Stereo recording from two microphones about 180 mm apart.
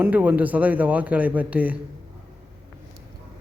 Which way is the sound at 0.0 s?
10° right (ahead or behind).